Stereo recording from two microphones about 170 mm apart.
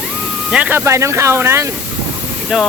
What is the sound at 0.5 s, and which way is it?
Speech, 10° right (ahead or behind).